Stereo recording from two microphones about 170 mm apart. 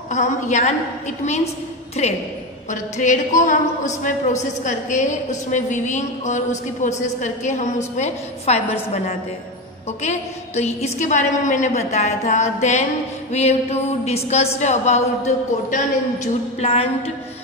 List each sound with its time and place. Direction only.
0.1 s a woman's voice: 45° left (ahead or behind)
10.0 s a woman's voice: 40° left (ahead or behind)